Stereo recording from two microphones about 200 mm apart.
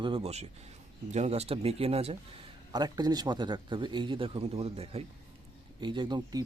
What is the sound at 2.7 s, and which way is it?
A man's voice, 20° right (ahead or behind).